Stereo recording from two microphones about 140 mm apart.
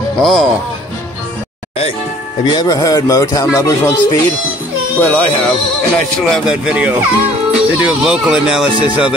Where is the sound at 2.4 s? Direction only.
30° left (ahead or behind).